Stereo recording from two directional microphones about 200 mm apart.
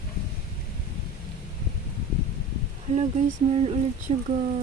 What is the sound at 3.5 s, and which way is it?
Speech, 30° right (ahead or behind).